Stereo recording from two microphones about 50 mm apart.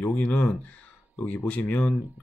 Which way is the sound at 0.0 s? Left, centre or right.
Left.